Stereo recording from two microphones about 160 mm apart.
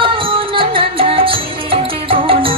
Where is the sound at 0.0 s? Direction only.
35° right (ahead or behind).